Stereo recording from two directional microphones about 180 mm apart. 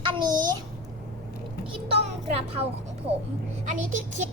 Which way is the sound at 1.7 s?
35° right (ahead or behind).